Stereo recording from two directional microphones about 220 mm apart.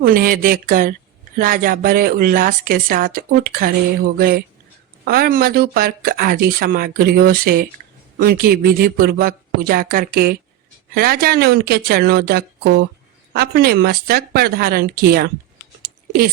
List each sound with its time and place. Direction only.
0.0 s a woman's voice: 40° right (ahead or behind)
15.8 s typing: 45° right (ahead or behind)